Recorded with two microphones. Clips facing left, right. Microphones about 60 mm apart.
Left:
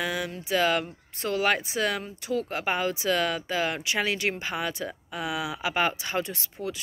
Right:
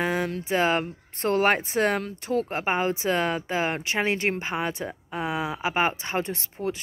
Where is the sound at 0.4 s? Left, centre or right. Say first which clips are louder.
Left 1 dB; right.